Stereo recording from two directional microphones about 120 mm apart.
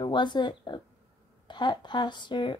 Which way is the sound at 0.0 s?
40° left (ahead or behind).